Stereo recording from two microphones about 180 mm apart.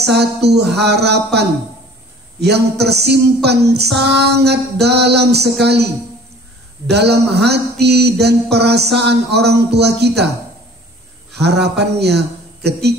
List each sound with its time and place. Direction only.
0.1 s female singing: 65° right (ahead or behind)
6.9 s female singing: 65° right (ahead or behind)
11.3 s a man's voice: 65° right (ahead or behind)